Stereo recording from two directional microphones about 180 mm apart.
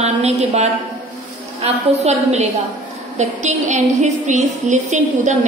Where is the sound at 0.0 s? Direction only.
35° right (ahead or behind).